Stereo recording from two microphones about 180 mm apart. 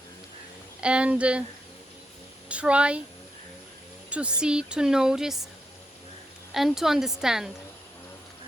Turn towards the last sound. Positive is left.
turn(degrees=-5)  # may be behind; listen again after turning